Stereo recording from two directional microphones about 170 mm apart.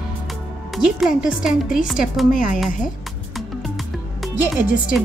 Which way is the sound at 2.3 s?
55° left (ahead or behind).